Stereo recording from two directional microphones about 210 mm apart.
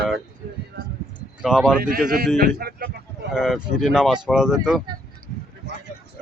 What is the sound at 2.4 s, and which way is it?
Speech, 45° right (ahead or behind).